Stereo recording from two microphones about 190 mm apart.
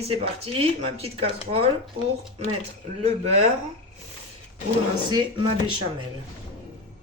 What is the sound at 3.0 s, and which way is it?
Speech, 35° right (ahead or behind).